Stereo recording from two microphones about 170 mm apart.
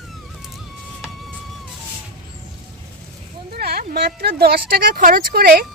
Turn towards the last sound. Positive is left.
turn(degrees=-60)  # may be behind; listen again after turning